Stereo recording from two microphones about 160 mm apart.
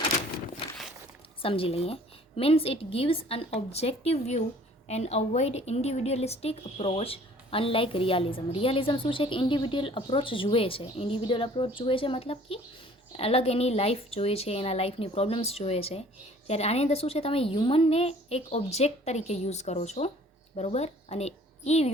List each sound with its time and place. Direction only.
1.4 s a woman's voice: 35° left (ahead or behind)